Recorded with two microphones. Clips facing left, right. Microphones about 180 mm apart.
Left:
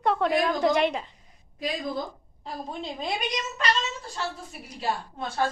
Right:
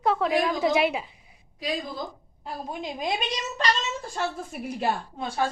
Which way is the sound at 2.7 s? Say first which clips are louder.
Right 3 dB; 15° right (ahead or behind).